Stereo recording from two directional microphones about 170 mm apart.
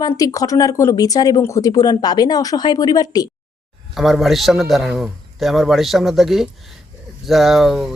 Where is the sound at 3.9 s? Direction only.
Centre (ahead or behind).